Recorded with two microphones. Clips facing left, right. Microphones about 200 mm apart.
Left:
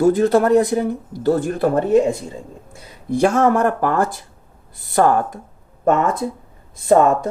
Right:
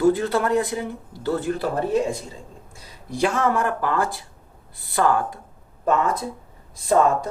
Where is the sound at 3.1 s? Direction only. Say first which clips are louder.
Left 6 dB; 45° left (ahead or behind).